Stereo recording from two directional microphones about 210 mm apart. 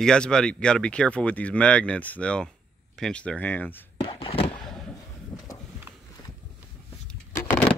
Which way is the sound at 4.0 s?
25° left (ahead or behind).